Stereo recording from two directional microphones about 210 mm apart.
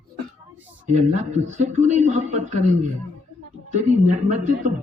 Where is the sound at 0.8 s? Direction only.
35° right (ahead or behind).